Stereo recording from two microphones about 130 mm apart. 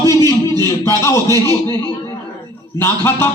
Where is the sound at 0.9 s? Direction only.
20° left (ahead or behind).